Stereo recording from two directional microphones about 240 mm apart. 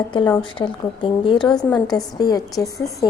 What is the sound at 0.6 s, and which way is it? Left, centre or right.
Speech, left.